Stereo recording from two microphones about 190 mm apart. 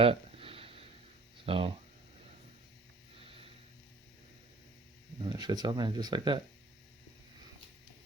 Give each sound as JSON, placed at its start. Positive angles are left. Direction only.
{"t": 0.0, "sound": "a sound", "side_deg": -30}
{"t": 1.5, "sound": "speech", "side_deg": -30}
{"t": 5.2, "sound": "speech", "side_deg": -20}